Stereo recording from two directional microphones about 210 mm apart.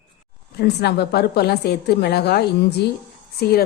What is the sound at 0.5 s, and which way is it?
A woman's voice, 50° left (ahead or behind).